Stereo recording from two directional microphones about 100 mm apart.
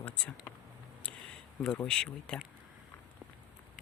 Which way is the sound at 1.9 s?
10° left (ahead or behind).